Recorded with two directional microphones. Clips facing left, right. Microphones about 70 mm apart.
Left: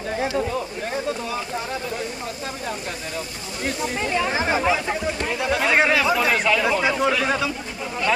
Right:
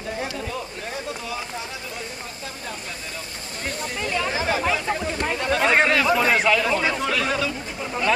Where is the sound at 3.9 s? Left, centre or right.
Left.